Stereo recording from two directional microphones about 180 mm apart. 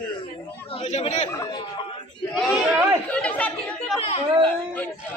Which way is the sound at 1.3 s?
20° left (ahead or behind).